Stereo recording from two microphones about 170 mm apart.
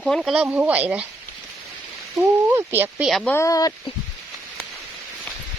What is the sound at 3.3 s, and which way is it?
Speech, 20° left (ahead or behind).